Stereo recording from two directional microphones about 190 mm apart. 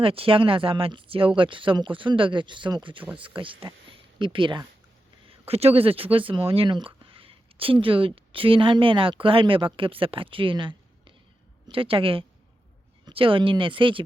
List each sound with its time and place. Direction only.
0.0 s speech: 30° right (ahead or behind)